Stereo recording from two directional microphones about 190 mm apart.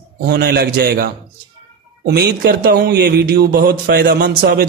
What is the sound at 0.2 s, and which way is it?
A man's voice, 60° right (ahead or behind).